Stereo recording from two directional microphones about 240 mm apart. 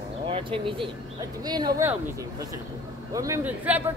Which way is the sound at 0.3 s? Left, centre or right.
Right.